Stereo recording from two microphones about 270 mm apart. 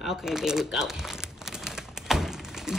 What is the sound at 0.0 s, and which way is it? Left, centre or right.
Crumpling, centre.